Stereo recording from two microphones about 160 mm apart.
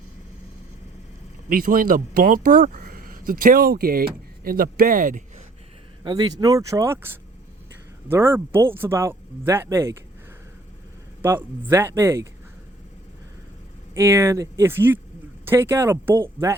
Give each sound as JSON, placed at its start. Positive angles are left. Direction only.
{"t": 1.5, "sound": "speech", "side_deg": -60}
{"t": 6.0, "sound": "speech", "side_deg": -25}
{"t": 11.2, "sound": "speech", "side_deg": -15}
{"t": 13.9, "sound": "speech", "side_deg": -15}